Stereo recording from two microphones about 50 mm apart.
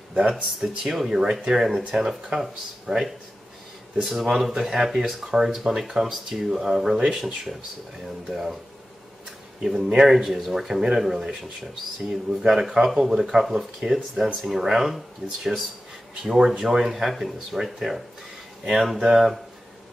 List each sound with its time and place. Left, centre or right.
0.1 s speech: right
0.6 s speech: centre
8.3 s speech: centre
9.6 s speech: centre
16.3 s speech: centre